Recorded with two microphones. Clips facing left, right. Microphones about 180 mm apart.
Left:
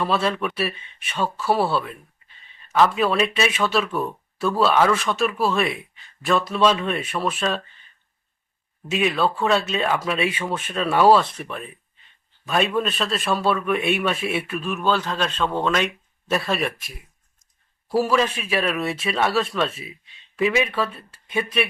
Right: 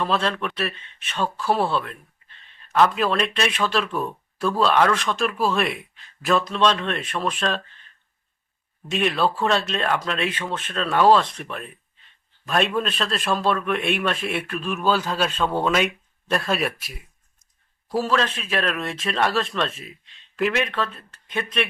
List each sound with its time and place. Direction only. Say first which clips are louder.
0.0 s a man's voice: left 1 dB; 5° left (ahead or behind)
8.9 s a man's voice: left 1 dB; centre (ahead or behind)
17.8 s a man's voice: left 3 dB; 10° left (ahead or behind)